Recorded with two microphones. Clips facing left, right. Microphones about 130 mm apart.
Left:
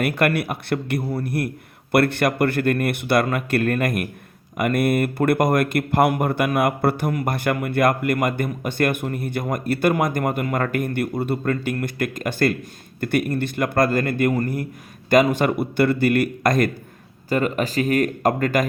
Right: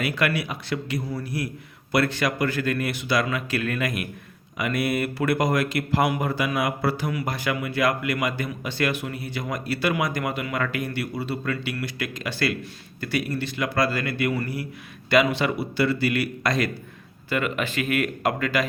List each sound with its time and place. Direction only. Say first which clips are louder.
0.0 s a man's voice: left 5 dB; 55° left (ahead or behind)
17.2 s speech: left 5 dB; 40° left (ahead or behind)